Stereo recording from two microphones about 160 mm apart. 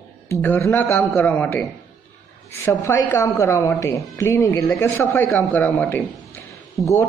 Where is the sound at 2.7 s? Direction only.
15° left (ahead or behind).